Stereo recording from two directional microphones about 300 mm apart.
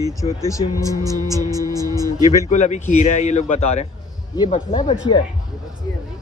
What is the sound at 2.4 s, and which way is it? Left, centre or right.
A man's voice, left.